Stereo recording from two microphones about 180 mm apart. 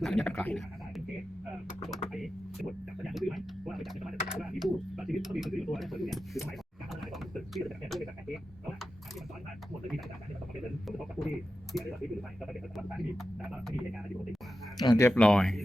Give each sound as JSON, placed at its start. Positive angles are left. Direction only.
{"t": 0.0, "sound": "speech", "side_deg": 0}
{"t": 2.1, "sound": "guitar", "side_deg": 0}
{"t": 6.9, "sound": "a sound", "side_deg": 0}
{"t": 10.8, "sound": "a sound", "side_deg": 0}
{"t": 14.8, "sound": "speech", "side_deg": 20}
{"t": 15.1, "sound": "speech", "side_deg": 5}